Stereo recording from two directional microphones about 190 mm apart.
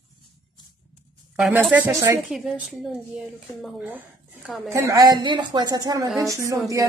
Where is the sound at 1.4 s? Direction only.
5° right (ahead or behind).